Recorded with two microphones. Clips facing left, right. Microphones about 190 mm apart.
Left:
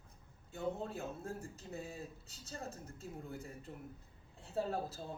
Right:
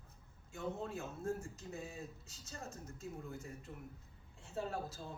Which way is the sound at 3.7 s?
30° left (ahead or behind).